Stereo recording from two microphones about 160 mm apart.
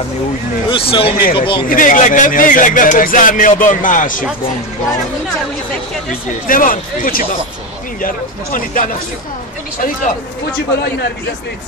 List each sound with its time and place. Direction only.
0.7 s a man's voice: 35° left (ahead or behind)
1.7 s speech: 55° left (ahead or behind)
6.4 s speech: 60° left (ahead or behind)